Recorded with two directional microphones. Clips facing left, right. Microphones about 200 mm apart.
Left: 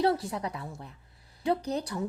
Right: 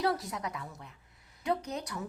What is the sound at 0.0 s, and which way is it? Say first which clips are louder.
A woman's voice: left 5 dB; 30° left (ahead or behind).